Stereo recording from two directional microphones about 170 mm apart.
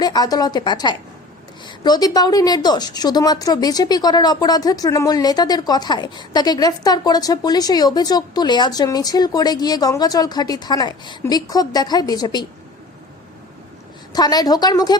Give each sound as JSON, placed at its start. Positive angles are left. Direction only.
{"t": 0.0, "sound": "a woman's voice", "side_deg": 25}
{"t": 14.1, "sound": "a woman's voice", "side_deg": 25}